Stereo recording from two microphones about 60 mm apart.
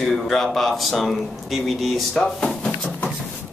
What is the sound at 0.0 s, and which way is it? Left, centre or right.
Speech, centre.